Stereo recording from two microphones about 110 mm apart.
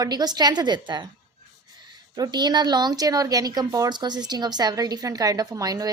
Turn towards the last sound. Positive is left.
turn(degrees=-35)  # may be behind; listen again after turning